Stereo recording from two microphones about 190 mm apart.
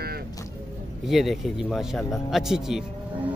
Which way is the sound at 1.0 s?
Centre (ahead or behind).